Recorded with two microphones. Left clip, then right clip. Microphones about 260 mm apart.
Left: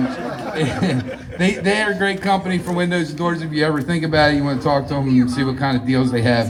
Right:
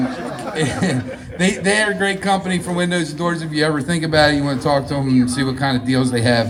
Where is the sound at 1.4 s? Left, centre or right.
Centre.